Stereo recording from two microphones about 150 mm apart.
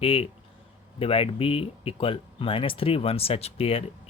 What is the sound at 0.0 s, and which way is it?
Speech, 40° left (ahead or behind).